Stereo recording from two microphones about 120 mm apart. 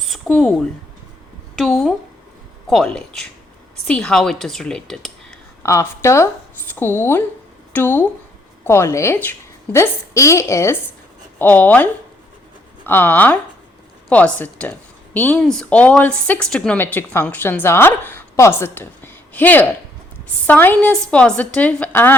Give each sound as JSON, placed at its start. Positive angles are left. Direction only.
{"t": 0.0, "sound": "a sound", "side_deg": 0}
{"t": 1.5, "sound": "speech", "side_deg": 0}
{"t": 5.6, "sound": "a woman's voice", "side_deg": 25}
{"t": 11.3, "sound": "speech", "side_deg": 15}